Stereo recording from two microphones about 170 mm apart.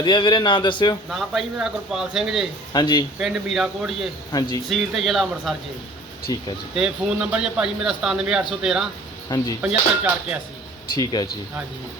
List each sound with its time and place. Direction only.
0.0 s a man's voice: 25° left (ahead or behind)
1.1 s speech: centre (ahead or behind)
2.7 s a man's voice: 25° left (ahead or behind)
3.2 s speech: centre (ahead or behind)
4.3 s a man's voice: 25° left (ahead or behind)
4.7 s speech: centre (ahead or behind)
6.3 s a man's voice: 20° left (ahead or behind)
6.7 s speech: 5° right (ahead or behind)
10.9 s a man's voice: 25° left (ahead or behind)